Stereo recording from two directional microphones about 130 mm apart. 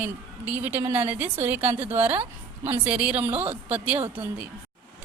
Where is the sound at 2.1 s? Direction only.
50° right (ahead or behind).